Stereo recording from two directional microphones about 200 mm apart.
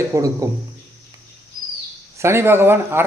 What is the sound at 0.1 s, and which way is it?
Speech, 15° right (ahead or behind).